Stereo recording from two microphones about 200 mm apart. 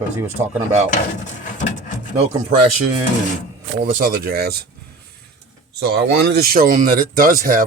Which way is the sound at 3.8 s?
45° right (ahead or behind).